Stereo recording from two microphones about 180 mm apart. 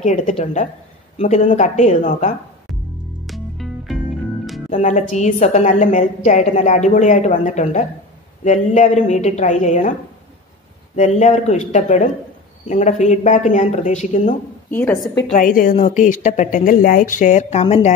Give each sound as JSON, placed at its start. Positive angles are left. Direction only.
{"t": 0.0, "sound": "a woman's voice", "side_deg": 40}
{"t": 3.3, "sound": "music", "side_deg": 0}
{"t": 4.6, "sound": "a woman's voice", "side_deg": 40}
{"t": 11.0, "sound": "a woman's voice", "side_deg": 40}
{"t": 14.7, "sound": "a woman's voice", "side_deg": 10}
{"t": 15.2, "sound": "a woman's voice", "side_deg": 50}